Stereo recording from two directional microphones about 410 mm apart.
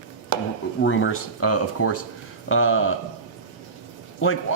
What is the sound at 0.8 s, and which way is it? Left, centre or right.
Speech, left.